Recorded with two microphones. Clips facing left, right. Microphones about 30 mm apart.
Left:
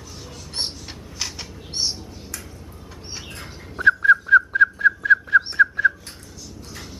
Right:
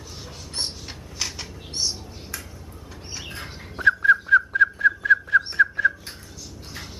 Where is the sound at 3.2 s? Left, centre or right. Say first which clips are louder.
Right 1 dB; centre.